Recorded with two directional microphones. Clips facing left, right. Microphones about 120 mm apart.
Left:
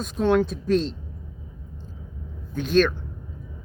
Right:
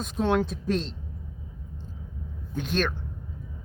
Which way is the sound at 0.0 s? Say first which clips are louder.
Left 4 dB; 20° right (ahead or behind).